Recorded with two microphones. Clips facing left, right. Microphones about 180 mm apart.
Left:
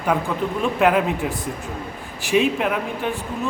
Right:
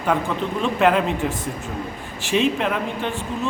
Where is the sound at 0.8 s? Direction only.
5° left (ahead or behind).